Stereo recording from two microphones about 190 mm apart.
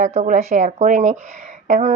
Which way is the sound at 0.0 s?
40° right (ahead or behind).